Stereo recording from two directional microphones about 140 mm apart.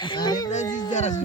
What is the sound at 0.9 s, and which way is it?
Speech, 60° left (ahead or behind).